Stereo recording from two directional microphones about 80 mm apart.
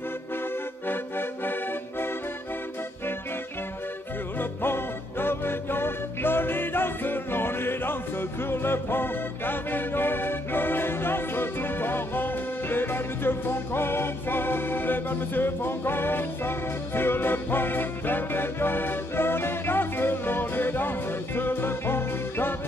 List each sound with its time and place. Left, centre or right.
0.8 s accordion: left
4.4 s music: left